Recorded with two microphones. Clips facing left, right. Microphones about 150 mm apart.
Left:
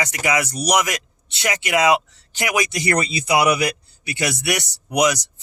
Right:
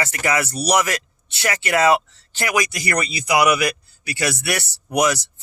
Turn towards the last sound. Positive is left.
turn(degrees=15)  # may be behind; listen again after turning